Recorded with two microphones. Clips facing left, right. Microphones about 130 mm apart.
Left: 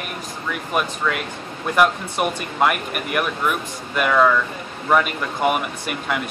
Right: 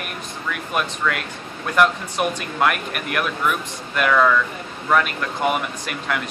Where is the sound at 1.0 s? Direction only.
5° left (ahead or behind).